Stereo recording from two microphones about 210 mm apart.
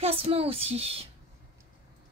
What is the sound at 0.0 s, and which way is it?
Speech, 25° right (ahead or behind).